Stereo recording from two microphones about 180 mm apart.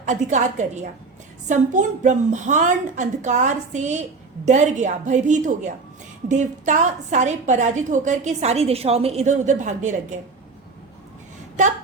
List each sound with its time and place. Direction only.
0.0 s a woman's voice: 40° right (ahead or behind)